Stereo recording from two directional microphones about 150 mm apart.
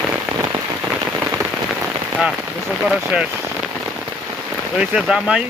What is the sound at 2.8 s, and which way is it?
Speech, 5° right (ahead or behind).